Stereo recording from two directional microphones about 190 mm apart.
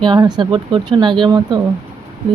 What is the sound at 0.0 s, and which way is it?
Speech, 25° right (ahead or behind).